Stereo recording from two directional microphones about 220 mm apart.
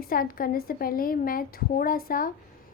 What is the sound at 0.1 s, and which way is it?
Speech, 40° left (ahead or behind).